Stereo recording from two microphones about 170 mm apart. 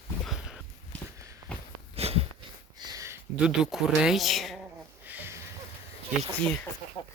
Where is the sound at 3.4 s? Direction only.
5° right (ahead or behind).